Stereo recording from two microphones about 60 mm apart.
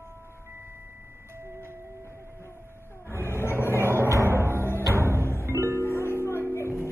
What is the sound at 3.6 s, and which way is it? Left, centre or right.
Vehicle, left.